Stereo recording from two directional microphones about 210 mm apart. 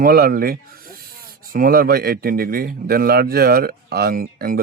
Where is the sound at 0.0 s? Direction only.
45° right (ahead or behind).